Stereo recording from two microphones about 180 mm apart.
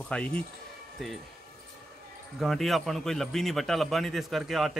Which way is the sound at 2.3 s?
Centre (ahead or behind).